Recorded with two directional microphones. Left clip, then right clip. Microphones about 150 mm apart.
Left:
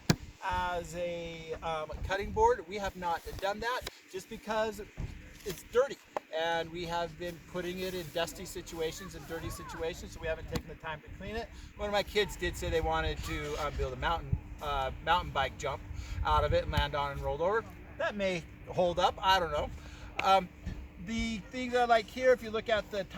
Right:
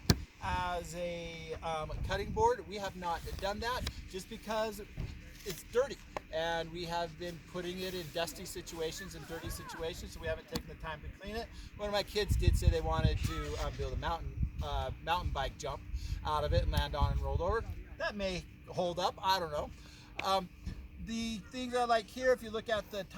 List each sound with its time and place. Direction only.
0.1 s speech: 5° left (ahead or behind)
5.7 s speech: 20° left (ahead or behind)